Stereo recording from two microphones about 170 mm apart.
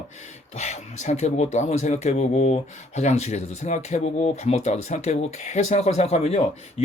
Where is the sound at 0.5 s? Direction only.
45° left (ahead or behind).